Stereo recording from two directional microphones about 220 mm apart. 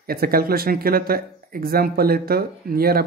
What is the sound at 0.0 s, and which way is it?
Speech, 45° right (ahead or behind).